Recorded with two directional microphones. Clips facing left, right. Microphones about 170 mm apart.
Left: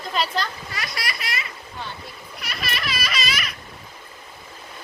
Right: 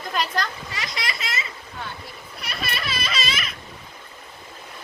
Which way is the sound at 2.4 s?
25° right (ahead or behind).